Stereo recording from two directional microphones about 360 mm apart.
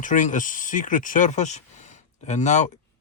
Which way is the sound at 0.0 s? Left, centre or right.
Left.